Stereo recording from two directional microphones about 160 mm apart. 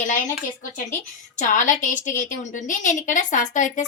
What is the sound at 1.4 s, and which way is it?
A woman's voice, 50° left (ahead or behind).